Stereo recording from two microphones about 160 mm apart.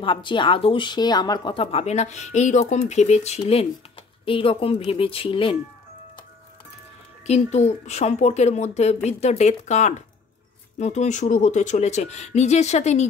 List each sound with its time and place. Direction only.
0.0 s speech: 30° left (ahead or behind)
7.2 s speech: 45° left (ahead or behind)